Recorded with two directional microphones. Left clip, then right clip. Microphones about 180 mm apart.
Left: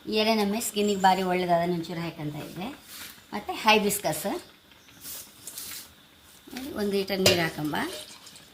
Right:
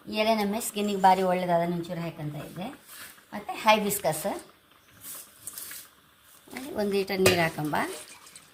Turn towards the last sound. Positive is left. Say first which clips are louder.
# right 2 dB
turn(degrees=-55)  # may be behind; listen again after turning